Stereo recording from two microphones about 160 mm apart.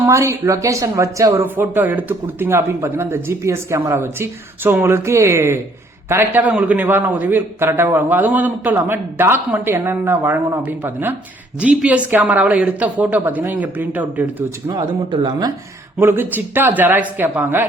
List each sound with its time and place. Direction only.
0.0 s speech: 20° right (ahead or behind)
14.7 s speech: 25° right (ahead or behind)
16.0 s speech: 15° right (ahead or behind)